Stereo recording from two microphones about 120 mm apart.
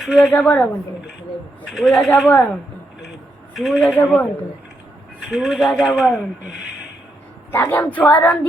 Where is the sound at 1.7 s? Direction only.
Centre (ahead or behind).